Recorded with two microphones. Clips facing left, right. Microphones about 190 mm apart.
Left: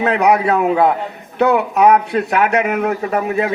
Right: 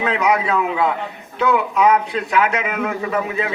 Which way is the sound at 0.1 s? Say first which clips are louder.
Left 5 dB; 60° left (ahead or behind).